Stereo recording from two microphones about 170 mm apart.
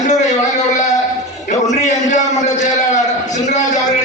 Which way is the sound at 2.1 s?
45° left (ahead or behind).